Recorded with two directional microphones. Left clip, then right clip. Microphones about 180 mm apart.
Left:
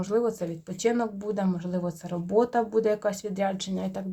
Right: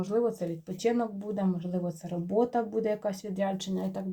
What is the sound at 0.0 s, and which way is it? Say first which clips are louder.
Speech: left 2 dB; 25° left (ahead or behind).